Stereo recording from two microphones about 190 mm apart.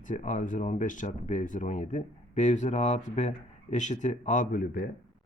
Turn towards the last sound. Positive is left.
turn(degrees=50)  # may be behind; listen again after turning